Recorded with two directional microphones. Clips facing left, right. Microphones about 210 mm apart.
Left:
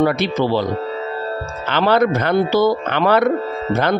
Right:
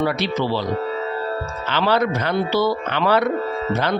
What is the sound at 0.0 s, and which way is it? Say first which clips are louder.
Speech: left 4 dB; 50° left (ahead or behind).